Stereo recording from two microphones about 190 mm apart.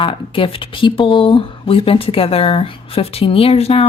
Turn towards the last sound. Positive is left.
turn(degrees=30)  # may be behind; listen again after turning